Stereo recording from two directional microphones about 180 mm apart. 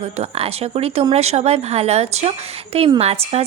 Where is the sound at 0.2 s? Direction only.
35° right (ahead or behind).